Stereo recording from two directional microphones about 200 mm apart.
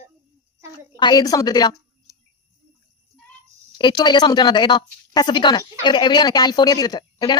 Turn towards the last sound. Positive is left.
turn(degrees=20)  # may be behind; listen again after turning